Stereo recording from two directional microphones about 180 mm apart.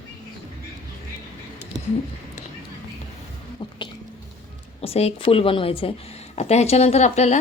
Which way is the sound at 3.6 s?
25° left (ahead or behind).